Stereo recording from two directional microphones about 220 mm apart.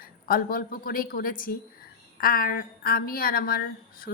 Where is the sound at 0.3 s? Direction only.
40° left (ahead or behind).